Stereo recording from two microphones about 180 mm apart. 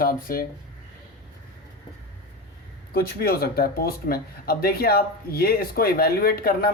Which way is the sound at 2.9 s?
60° left (ahead or behind).